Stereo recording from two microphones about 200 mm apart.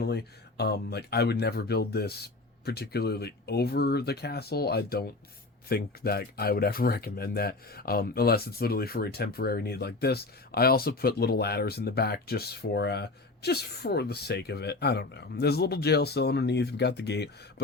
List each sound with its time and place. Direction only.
0.0 s speech: 55° left (ahead or behind)